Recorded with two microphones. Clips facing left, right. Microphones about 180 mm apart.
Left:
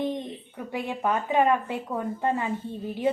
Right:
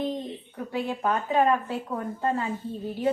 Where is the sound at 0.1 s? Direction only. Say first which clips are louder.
Even; 15° left (ahead or behind).